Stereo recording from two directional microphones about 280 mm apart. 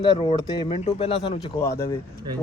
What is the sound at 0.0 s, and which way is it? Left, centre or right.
Speech, centre.